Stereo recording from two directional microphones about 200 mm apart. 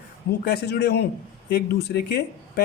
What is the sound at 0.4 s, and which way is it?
Speech, 55° left (ahead or behind).